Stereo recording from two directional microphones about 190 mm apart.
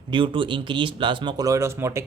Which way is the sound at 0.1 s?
25° right (ahead or behind).